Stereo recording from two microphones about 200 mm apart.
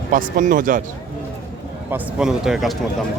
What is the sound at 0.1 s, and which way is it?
Speech, 40° right (ahead or behind).